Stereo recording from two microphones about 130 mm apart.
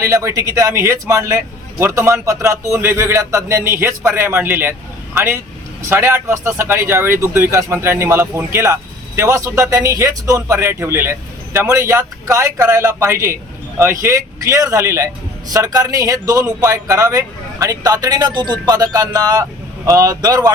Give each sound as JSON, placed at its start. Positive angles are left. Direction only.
{"t": 0.0, "sound": "speech", "side_deg": -25}